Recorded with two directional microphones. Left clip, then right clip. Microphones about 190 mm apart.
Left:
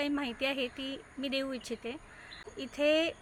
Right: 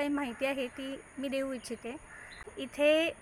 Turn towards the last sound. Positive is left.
turn(degrees=0)  # may be behind; listen again after turning